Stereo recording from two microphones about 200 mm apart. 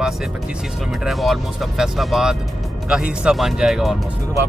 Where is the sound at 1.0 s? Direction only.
Centre (ahead or behind).